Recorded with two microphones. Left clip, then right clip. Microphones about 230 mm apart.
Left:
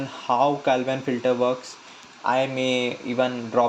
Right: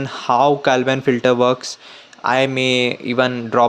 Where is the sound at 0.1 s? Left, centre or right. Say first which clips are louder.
Right 7 dB; right.